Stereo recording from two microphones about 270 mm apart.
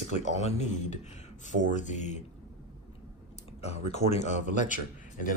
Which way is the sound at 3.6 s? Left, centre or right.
Left.